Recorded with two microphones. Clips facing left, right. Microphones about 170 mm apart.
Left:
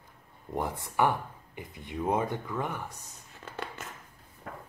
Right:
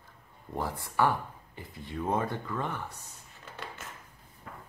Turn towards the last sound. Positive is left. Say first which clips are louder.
# left 4 dB
turn(degrees=60)  # may be behind; listen again after turning